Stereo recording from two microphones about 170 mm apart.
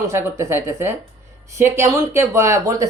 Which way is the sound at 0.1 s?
15° right (ahead or behind).